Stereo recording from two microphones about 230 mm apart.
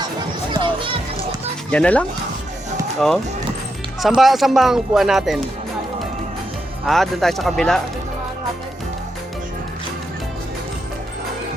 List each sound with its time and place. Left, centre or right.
0.6 s children playing: right
1.7 s a man's voice: centre
6.8 s a man's voice: centre